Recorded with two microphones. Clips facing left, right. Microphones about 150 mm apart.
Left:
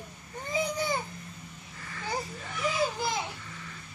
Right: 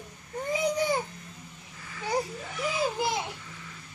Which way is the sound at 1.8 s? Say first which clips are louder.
Right 5 dB; 5° right (ahead or behind).